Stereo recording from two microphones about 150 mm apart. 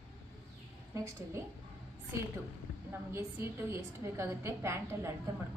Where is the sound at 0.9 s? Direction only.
20° right (ahead or behind).